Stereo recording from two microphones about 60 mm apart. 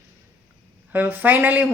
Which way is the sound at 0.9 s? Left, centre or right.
Right.